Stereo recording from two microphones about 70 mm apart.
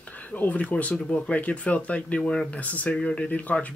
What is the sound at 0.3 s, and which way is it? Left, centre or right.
Speech, left.